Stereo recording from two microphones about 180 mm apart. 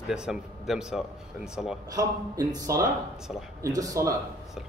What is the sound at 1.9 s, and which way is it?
A man's voice, 20° right (ahead or behind).